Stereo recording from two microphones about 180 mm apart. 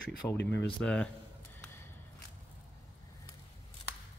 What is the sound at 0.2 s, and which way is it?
Speech, 15° left (ahead or behind).